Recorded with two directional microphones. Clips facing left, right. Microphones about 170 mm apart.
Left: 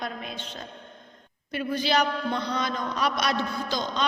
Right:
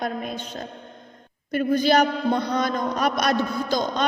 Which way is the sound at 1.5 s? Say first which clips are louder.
Right 7 dB; 45° right (ahead or behind).